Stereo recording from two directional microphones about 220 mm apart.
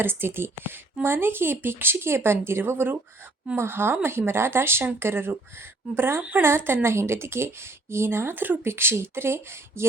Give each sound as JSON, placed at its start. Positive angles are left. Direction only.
{"t": 0.0, "sound": "speech", "side_deg": -10}